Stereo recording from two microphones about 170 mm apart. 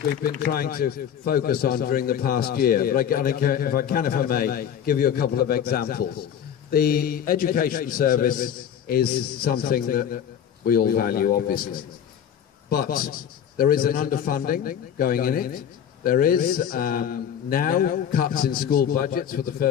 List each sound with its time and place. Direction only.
0.5 s a man's voice: 60° left (ahead or behind)